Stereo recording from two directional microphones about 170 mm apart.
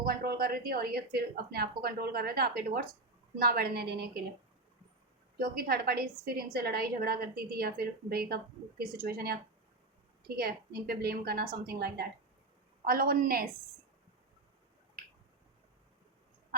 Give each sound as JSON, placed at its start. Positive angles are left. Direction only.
{"t": 0.0, "sound": "a woman's voice", "side_deg": -60}
{"t": 5.4, "sound": "a woman's voice", "side_deg": -60}
{"t": 15.0, "sound": "finger snapping", "side_deg": -55}